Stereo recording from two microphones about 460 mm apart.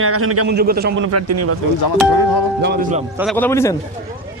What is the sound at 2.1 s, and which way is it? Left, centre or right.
Music, left.